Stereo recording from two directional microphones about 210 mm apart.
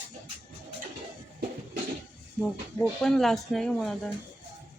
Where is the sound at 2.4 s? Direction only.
5° left (ahead or behind).